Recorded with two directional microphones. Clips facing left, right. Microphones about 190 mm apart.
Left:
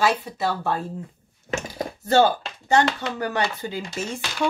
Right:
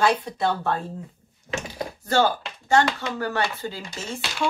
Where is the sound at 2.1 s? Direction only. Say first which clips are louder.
Left 3 dB; 20° left (ahead or behind).